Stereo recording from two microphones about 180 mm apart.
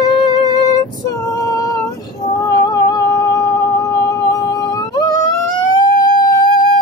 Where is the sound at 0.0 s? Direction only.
20° left (ahead or behind).